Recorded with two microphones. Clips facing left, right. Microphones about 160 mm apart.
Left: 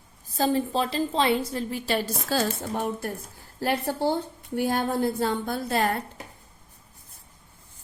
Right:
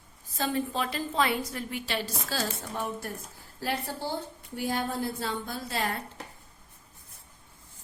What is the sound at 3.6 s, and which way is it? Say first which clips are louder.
A woman's voice: left 7 dB; 65° left (ahead or behind).